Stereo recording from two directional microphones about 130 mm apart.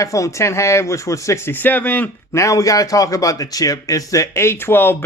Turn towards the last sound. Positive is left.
turn(degrees=15)  # may be behind; listen again after turning